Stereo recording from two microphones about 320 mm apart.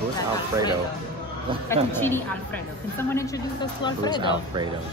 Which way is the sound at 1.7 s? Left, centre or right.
Centre.